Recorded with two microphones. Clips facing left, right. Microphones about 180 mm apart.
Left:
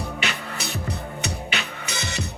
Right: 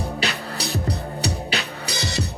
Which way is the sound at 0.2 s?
35° right (ahead or behind).